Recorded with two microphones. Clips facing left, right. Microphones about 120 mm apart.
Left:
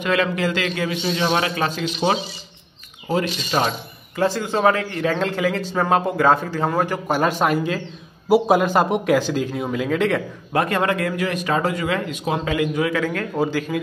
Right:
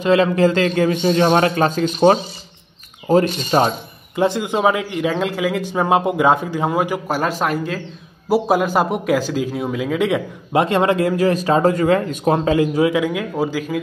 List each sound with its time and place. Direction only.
0.0 s a man's voice: 30° right (ahead or behind); by 3.5 s 50° right (ahead or behind)
4.1 s a man's voice: 20° right (ahead or behind)
10.5 s a man's voice: 25° right (ahead or behind)
11.1 s a man's voice: 35° right (ahead or behind)
12.9 s a man's voice: 10° right (ahead or behind)